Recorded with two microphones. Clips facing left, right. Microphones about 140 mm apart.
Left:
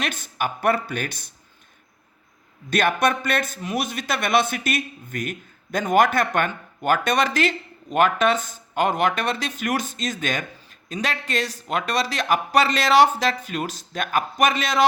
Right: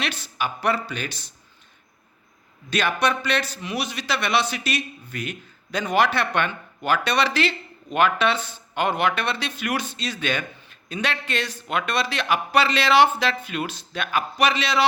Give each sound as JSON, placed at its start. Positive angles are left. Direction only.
{"t": 0.0, "sound": "a man's voice", "side_deg": 50}
{"t": 2.6, "sound": "a man's voice", "side_deg": 50}